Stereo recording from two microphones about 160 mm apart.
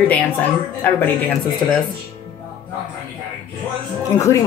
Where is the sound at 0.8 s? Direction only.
10° left (ahead or behind).